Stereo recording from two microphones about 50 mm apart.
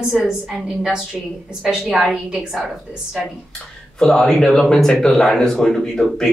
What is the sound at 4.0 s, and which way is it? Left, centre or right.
Speech, centre.